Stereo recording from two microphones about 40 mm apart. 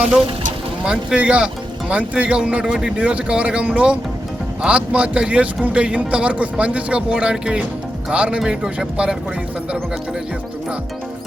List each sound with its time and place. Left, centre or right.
0.9 s a man's voice: right
8.4 s speech: right